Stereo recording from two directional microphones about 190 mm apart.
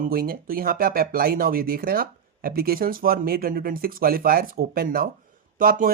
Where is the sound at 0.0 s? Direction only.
50° right (ahead or behind).